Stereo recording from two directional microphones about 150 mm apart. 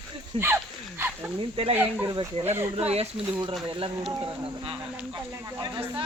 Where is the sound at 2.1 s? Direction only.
25° right (ahead or behind).